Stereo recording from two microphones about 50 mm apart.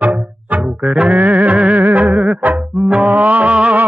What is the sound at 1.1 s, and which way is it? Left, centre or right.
Music, right.